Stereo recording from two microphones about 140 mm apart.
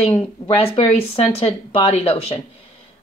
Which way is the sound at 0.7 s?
45° left (ahead or behind).